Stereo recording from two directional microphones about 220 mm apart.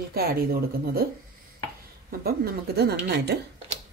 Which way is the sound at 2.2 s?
45° right (ahead or behind).